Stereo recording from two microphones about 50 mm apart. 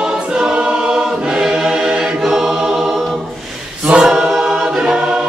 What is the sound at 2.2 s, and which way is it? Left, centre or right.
Choir, centre.